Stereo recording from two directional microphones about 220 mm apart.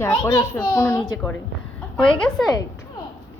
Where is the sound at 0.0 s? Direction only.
15° left (ahead or behind).